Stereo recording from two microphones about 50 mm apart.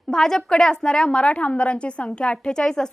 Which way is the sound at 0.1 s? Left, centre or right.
Centre.